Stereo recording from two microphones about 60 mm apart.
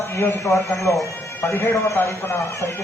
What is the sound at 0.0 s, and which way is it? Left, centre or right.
A man's voice, left.